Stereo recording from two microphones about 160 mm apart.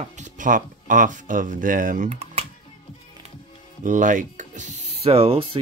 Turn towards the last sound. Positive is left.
turn(degrees=-35)  # may be behind; listen again after turning